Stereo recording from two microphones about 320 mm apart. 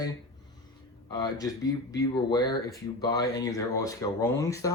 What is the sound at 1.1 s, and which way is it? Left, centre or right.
A man's voice, centre.